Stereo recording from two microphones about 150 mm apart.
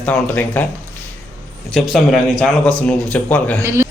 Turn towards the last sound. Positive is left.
turn(degrees=-20)  # may be behind; listen again after turning